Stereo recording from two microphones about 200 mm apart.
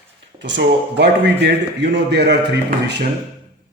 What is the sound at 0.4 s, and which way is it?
A man's voice, 60° right (ahead or behind).